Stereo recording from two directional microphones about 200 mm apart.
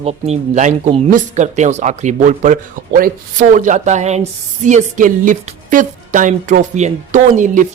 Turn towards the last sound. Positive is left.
turn(degrees=-40)  # may be behind; listen again after turning